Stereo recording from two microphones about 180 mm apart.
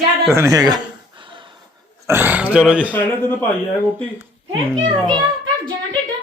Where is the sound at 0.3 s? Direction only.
15° right (ahead or behind).